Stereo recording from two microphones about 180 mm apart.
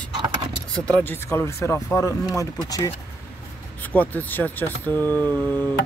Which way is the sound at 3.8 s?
10° left (ahead or behind).